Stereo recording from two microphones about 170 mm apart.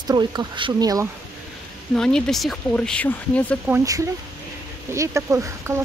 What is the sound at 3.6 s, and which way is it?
Speech, 15° right (ahead or behind).